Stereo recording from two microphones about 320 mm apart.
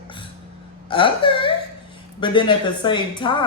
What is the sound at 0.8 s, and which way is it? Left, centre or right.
A woman's voice, centre.